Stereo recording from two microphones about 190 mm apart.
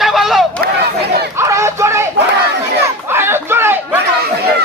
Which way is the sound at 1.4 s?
15° right (ahead or behind).